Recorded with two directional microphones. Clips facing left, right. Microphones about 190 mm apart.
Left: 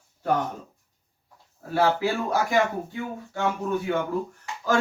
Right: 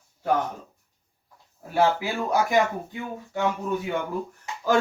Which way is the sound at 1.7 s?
15° right (ahead or behind).